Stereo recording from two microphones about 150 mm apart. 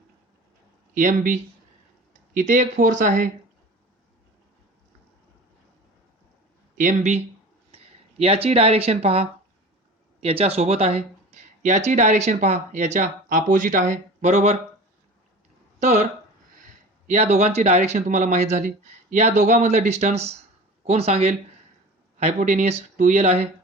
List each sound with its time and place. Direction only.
0.9 s speech: 60° right (ahead or behind)
6.7 s speech: 55° right (ahead or behind)
8.2 s speech: 40° right (ahead or behind)
11.6 s speech: 55° right (ahead or behind)
15.8 s speech: 50° right (ahead or behind)
17.1 s speech: 45° right (ahead or behind)